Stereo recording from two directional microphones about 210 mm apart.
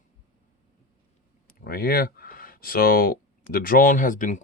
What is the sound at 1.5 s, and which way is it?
Speech, 45° left (ahead or behind).